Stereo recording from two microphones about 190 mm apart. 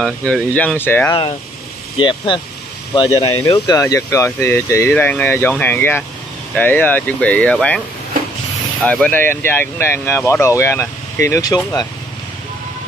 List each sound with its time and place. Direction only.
0.0 s speech: 5° left (ahead or behind)
2.0 s speech: 25° left (ahead or behind); by 7.8 s 5° left (ahead or behind)
8.8 s speech: 5° left (ahead or behind)